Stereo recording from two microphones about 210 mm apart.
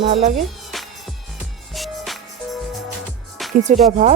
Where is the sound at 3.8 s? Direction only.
35° right (ahead or behind).